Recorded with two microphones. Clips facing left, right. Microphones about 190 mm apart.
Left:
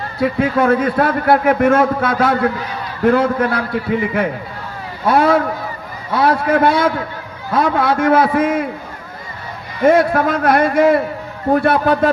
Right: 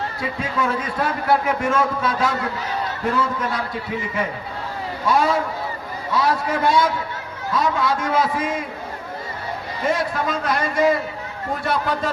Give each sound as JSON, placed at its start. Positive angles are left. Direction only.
{"t": 0.2, "sound": "a man's voice", "side_deg": 60}
{"t": 9.8, "sound": "a man's voice", "side_deg": 60}